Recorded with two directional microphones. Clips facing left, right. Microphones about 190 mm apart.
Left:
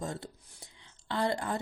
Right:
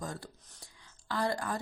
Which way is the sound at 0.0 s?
25° left (ahead or behind).